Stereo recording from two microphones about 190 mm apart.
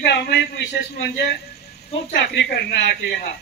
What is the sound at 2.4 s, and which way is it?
Speech, 60° left (ahead or behind).